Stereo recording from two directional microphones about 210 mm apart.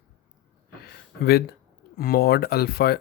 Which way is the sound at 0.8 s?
45° left (ahead or behind).